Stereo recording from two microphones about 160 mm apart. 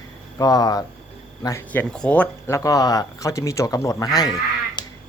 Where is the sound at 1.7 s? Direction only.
5° left (ahead or behind).